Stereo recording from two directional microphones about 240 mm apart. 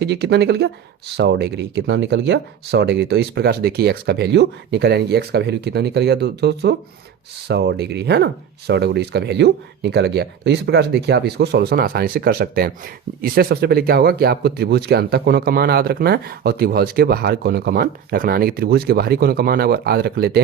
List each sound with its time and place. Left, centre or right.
0.0 s speech: right